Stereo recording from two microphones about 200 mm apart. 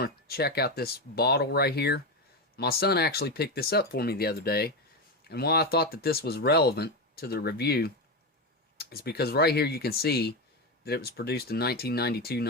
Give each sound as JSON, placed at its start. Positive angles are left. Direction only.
{"t": 0.0, "sound": "speech", "side_deg": 50}